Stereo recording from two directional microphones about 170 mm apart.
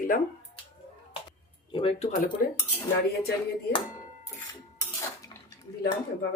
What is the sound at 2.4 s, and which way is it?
Speech, 55° left (ahead or behind).